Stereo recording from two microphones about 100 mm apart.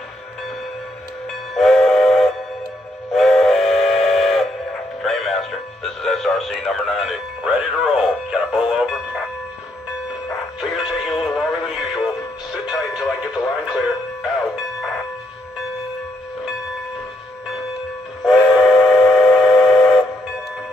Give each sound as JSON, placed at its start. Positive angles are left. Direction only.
{"t": 1.5, "sound": "train", "side_deg": 0}
{"t": 3.1, "sound": "steam whistle", "side_deg": 0}
{"t": 5.0, "sound": "music", "side_deg": 0}
{"t": 10.6, "sound": "synthetic singing", "side_deg": -5}
{"t": 12.6, "sound": "music", "side_deg": -5}
{"t": 18.2, "sound": "train", "side_deg": -5}